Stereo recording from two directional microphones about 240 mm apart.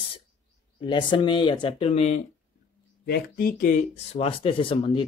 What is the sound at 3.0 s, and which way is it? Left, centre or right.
Speech, left.